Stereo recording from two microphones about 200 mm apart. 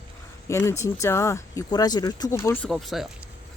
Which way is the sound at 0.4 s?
15° left (ahead or behind).